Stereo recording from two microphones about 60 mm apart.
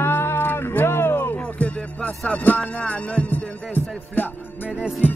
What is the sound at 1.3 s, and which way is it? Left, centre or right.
Music, left.